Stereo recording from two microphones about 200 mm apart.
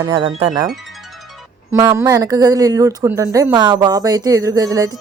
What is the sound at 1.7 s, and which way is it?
Speech, 20° right (ahead or behind).